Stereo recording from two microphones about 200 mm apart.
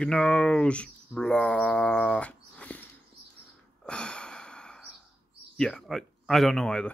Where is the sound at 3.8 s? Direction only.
5° left (ahead or behind).